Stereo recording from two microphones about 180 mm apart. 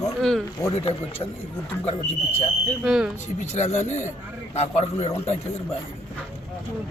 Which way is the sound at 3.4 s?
40° left (ahead or behind).